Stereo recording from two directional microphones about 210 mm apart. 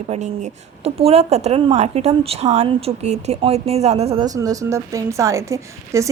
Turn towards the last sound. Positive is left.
turn(degrees=-15)  # may be behind; listen again after turning